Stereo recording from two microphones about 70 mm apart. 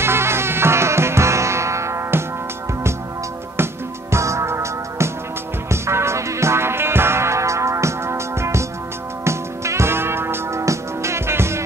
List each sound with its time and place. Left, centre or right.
0.0 s music: right
4.1 s music: right